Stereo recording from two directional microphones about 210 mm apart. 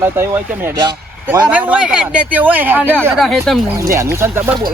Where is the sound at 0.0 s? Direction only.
10° right (ahead or behind).